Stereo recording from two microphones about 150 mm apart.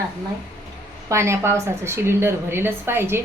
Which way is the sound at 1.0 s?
20° right (ahead or behind).